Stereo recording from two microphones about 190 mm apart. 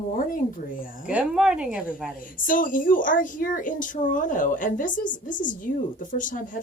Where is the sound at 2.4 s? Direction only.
45° left (ahead or behind).